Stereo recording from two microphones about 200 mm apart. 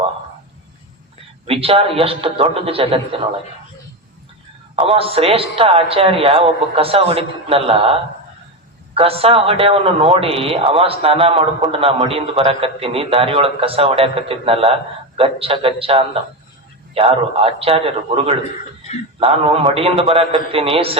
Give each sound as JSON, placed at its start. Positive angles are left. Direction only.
{"t": 1.5, "sound": "a man's voice", "side_deg": -30}
{"t": 4.8, "sound": "a man's voice", "side_deg": -30}
{"t": 9.0, "sound": "a man's voice", "side_deg": -30}